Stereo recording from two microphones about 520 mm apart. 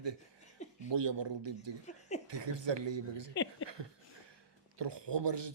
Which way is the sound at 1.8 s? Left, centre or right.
Centre.